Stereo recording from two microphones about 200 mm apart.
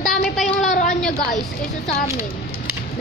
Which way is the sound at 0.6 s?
40° left (ahead or behind).